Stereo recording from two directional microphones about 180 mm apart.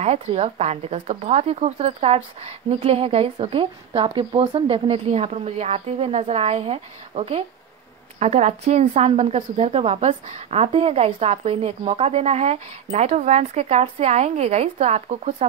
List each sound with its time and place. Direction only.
0.0 s speech: 35° right (ahead or behind)